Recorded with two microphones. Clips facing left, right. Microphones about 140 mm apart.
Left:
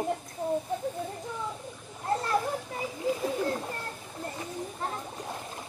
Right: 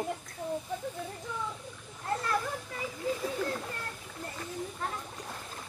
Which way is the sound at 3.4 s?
30° left (ahead or behind).